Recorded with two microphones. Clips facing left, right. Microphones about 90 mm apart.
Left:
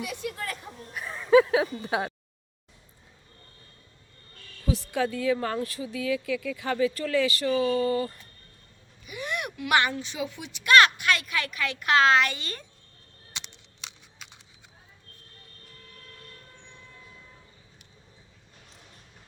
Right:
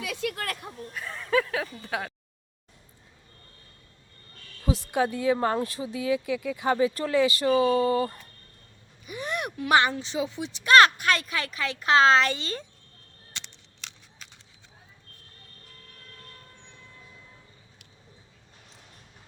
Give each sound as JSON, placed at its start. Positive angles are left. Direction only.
{"t": 0.2, "sound": "a woman's voice", "side_deg": -80}
{"t": 0.9, "sound": "speech", "side_deg": 15}
{"t": 4.6, "sound": "speech", "side_deg": -20}
{"t": 9.0, "sound": "speech", "side_deg": -35}